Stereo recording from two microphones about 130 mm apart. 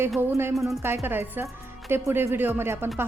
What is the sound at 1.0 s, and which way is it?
Speech, 15° right (ahead or behind).